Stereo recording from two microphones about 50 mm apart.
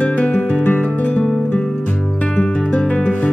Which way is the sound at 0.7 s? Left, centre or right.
Left.